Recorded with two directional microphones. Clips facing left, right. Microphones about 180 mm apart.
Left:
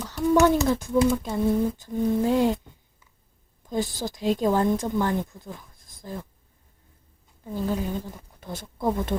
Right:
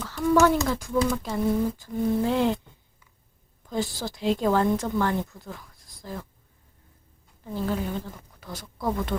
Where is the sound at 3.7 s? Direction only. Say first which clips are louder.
Left 1 dB; 15° left (ahead or behind).